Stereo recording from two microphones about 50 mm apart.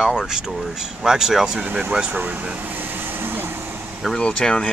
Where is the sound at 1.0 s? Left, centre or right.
Centre.